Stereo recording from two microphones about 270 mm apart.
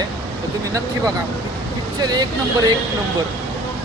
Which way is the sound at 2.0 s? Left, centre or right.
Centre.